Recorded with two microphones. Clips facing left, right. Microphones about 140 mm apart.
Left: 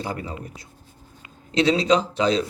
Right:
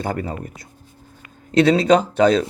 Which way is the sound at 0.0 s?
55° right (ahead or behind).